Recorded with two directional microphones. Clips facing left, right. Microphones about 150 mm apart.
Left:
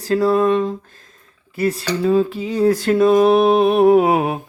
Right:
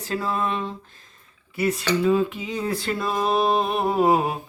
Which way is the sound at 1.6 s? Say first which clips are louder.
Left 3 dB; 35° left (ahead or behind).